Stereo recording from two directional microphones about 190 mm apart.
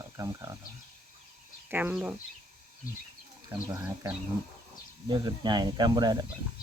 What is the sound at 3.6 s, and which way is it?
Speech, 15° right (ahead or behind).